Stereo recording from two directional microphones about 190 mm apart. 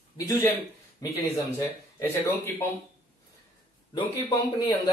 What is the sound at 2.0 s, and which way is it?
Speech, 10° left (ahead or behind).